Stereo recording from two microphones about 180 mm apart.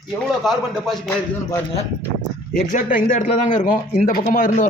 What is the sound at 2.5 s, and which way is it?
A man's voice, 45° left (ahead or behind).